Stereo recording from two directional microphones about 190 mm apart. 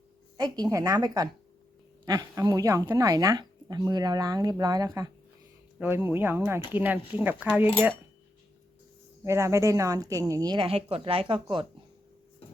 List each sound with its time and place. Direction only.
0.3 s speech: 20° right (ahead or behind)
9.2 s speech: 15° right (ahead or behind)